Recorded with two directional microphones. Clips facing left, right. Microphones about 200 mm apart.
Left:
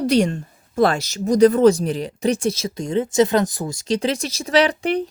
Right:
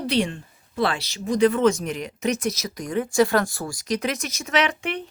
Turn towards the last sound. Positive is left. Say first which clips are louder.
# left 7 dB
turn(degrees=35)  # may be behind; listen again after turning